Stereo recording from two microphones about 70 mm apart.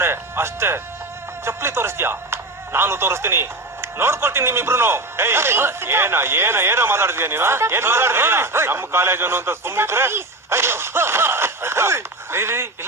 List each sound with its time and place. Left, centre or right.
0.0 s speech: right